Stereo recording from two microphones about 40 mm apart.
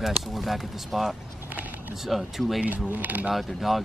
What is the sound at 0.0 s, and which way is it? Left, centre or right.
Speech, centre.